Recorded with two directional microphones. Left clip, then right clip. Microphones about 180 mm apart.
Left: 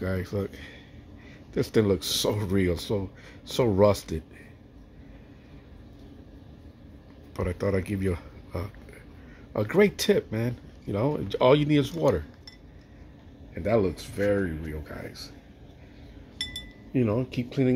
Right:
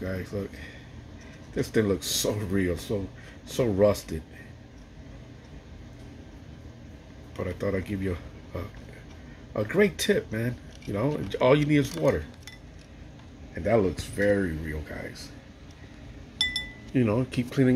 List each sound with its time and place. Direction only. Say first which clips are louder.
0.0 s speech: left 2 dB; 25° left (ahead or behind)
7.3 s speech: left 2 dB; 20° left (ahead or behind)
13.6 s speech: right 1 dB; 10° left (ahead or behind)
16.9 s speech: right 1 dB; 5° left (ahead or behind)